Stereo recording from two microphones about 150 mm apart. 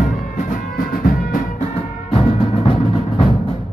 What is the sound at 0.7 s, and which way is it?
Music, 65° left (ahead or behind).